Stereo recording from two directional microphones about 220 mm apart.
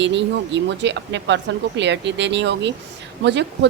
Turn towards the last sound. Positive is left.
turn(degrees=-50)  # may be behind; listen again after turning